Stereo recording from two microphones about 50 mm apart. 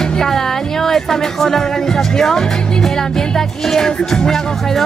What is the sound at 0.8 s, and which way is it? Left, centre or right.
Speech, centre.